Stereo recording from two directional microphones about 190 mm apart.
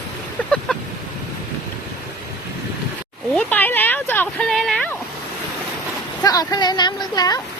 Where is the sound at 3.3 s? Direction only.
10° left (ahead or behind).